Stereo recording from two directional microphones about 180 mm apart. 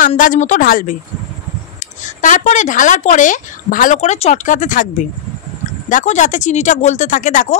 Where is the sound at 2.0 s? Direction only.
45° left (ahead or behind).